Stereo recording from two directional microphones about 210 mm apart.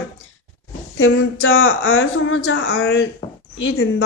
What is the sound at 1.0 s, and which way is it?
A woman's voice, 70° left (ahead or behind).